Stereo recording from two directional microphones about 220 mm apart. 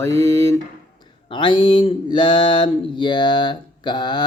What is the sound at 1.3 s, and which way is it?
Speech, 20° left (ahead or behind).